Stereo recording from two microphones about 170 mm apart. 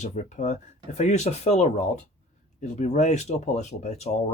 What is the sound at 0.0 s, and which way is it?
Speech, 45° left (ahead or behind).